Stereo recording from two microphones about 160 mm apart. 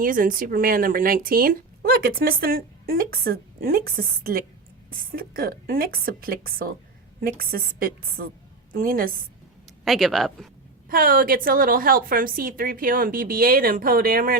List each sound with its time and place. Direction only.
0.0 s a woman's voice: 60° right (ahead or behind)
9.8 s speech: centre (ahead or behind)
10.8 s speech: 65° right (ahead or behind)